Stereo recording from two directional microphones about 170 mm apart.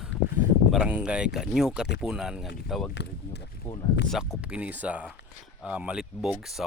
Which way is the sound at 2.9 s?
90° left.